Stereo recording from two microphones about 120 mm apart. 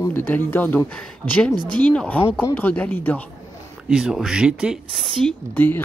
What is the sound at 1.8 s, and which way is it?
Speech, 10° left (ahead or behind).